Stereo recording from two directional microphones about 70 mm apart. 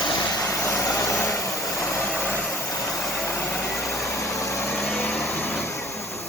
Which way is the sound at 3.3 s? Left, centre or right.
Left.